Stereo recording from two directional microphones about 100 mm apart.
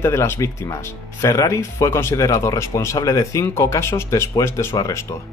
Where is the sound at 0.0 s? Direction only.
25° left (ahead or behind).